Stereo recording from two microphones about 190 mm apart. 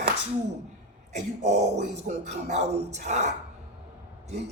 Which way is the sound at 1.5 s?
40° right (ahead or behind).